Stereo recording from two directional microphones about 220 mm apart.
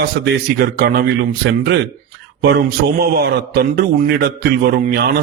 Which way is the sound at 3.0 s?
45° right (ahead or behind).